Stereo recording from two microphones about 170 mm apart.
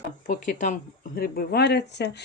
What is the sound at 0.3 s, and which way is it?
Speech, 50° left (ahead or behind).